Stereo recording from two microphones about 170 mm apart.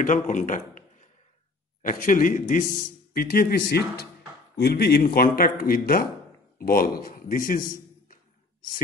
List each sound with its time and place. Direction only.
0.0 s a man's voice: 50° left (ahead or behind)